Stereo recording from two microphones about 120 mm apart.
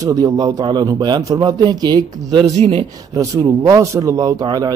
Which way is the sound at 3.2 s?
30° right (ahead or behind).